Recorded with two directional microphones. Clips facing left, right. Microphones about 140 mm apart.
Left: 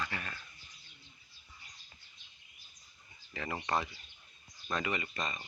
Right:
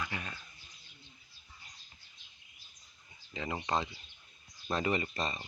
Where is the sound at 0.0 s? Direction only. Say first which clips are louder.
Even; 15° right (ahead or behind).